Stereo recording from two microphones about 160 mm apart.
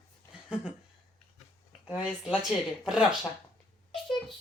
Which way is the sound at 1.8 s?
5° right (ahead or behind).